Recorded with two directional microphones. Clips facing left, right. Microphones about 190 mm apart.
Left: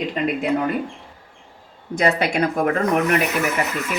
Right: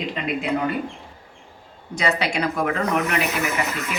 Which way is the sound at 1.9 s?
50° left (ahead or behind).